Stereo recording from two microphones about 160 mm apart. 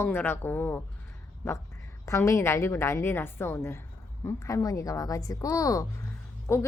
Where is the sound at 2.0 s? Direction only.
20° left (ahead or behind).